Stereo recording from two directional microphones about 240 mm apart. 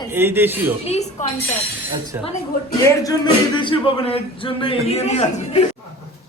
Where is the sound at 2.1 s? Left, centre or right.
Centre.